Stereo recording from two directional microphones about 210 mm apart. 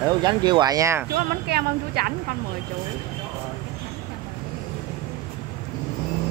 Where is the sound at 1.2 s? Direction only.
50° right (ahead or behind).